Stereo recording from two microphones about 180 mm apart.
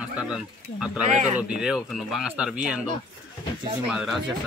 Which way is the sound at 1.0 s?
40° right (ahead or behind).